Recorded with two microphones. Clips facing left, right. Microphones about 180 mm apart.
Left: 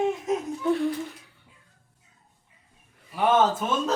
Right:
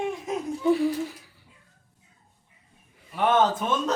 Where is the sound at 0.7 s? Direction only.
Centre (ahead or behind).